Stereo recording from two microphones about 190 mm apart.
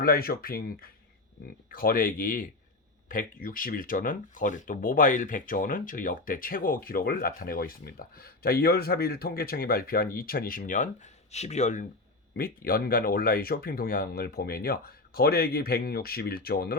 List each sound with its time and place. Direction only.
0.0 s speech: 50° left (ahead or behind)
12.4 s speech: 50° left (ahead or behind)